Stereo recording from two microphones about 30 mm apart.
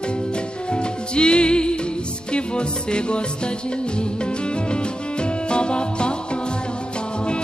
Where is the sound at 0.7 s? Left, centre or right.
Left.